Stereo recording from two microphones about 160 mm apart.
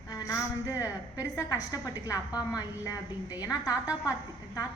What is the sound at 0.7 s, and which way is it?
A woman's voice, 20° left (ahead or behind).